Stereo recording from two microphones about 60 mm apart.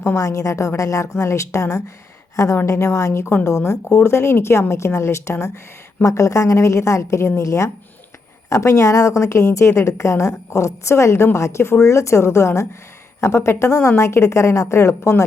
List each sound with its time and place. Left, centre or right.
0.2 s a woman's voice: left
6.0 s a woman's voice: left